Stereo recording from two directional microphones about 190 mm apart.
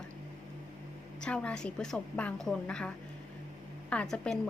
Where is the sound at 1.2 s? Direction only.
5° left (ahead or behind).